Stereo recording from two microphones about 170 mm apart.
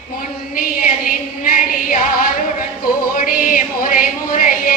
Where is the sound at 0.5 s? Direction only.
55° left (ahead or behind).